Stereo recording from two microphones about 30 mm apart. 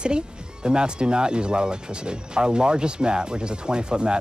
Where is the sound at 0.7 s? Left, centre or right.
Right.